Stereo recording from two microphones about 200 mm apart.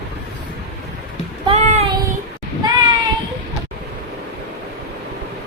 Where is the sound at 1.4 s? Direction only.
35° right (ahead or behind).